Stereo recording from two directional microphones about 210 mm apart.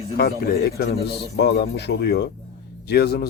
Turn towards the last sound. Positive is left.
turn(degrees=50)  # may be behind; listen again after turning